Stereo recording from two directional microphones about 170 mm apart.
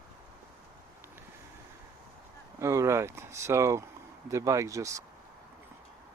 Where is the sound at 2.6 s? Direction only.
15° right (ahead or behind).